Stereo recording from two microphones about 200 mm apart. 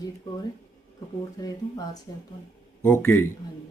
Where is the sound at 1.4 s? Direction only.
20° left (ahead or behind).